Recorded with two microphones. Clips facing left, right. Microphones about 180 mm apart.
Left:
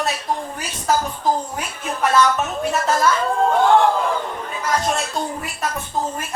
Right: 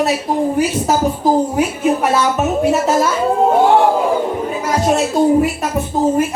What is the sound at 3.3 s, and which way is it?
Speech, 20° right (ahead or behind).